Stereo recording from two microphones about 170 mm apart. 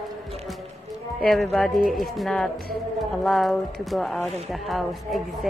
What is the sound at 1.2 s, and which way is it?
Speech, centre (ahead or behind).